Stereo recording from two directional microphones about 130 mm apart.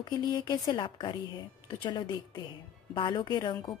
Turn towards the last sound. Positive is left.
turn(degrees=35)  # may be behind; listen again after turning